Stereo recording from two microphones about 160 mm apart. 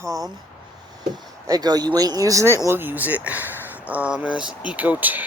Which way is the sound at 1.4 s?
25° right (ahead or behind).